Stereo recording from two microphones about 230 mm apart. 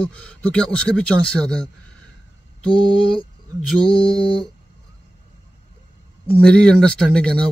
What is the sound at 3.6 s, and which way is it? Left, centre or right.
Speech, centre.